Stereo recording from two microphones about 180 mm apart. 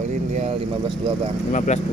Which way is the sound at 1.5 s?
40° left (ahead or behind).